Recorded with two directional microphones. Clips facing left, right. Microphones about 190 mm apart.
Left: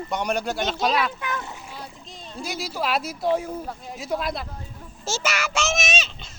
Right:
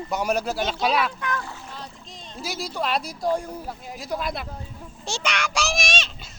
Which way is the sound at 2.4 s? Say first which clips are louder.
Even; centre (ahead or behind).